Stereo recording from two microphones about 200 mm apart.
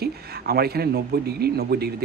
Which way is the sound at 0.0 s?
50° right (ahead or behind).